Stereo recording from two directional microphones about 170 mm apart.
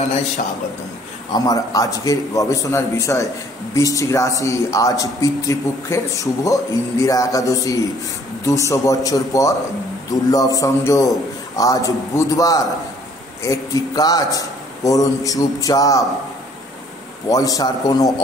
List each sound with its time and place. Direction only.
1.3 s a man's voice: 20° left (ahead or behind)
17.3 s a man's voice: 20° left (ahead or behind)